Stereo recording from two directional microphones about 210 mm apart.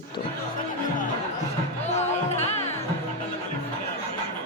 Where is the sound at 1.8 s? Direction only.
35° left (ahead or behind).